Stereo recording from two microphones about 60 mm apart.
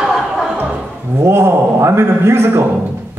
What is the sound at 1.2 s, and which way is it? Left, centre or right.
A man's voice, right.